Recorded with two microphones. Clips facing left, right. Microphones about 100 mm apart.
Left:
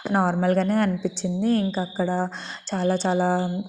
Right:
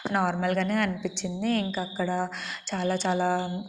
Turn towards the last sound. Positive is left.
turn(degrees=35)  # may be behind; listen again after turning